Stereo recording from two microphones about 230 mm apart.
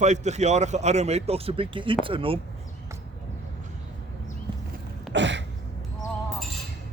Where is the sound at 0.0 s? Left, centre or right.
Right.